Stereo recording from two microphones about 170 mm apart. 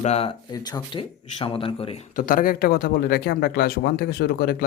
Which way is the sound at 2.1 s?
55° left (ahead or behind).